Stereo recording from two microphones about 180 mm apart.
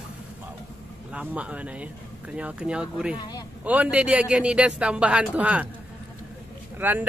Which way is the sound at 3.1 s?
25° left (ahead or behind).